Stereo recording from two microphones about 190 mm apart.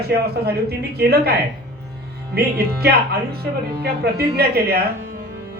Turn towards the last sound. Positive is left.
turn(degrees=-55)  # may be behind; listen again after turning